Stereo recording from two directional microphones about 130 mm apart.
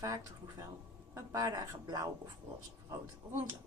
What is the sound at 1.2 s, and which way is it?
Speech, 25° right (ahead or behind).